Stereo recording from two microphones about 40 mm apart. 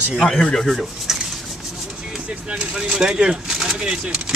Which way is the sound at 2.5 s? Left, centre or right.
Right.